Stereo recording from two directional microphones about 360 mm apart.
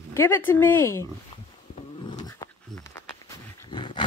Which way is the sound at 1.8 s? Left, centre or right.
Centre.